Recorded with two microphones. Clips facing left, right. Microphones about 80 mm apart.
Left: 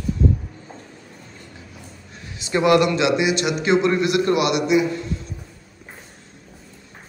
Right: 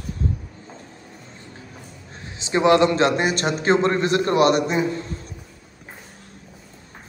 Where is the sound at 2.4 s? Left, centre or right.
Right.